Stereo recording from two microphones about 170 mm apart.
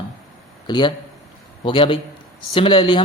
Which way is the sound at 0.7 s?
25° left (ahead or behind).